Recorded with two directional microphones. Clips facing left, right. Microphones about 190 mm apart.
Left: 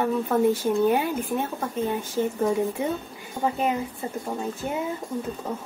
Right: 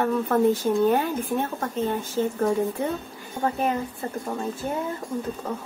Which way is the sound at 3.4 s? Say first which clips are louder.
Even; 10° left (ahead or behind).